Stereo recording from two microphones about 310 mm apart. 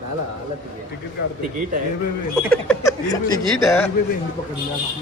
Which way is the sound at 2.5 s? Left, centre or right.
Centre.